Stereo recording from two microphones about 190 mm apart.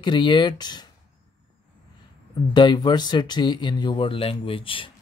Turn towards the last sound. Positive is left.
turn(degrees=30)  # may be behind; listen again after turning